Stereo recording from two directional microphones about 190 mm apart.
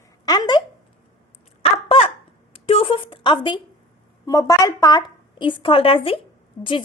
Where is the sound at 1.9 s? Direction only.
30° left (ahead or behind).